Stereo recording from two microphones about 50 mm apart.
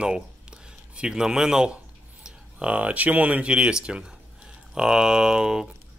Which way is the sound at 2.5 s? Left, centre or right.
Right.